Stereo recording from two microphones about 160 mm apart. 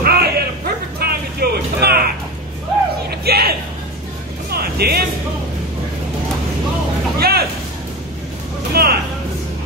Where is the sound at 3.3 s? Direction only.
80° right.